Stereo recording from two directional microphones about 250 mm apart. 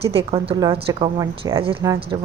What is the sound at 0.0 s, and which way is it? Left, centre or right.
A woman's voice, right.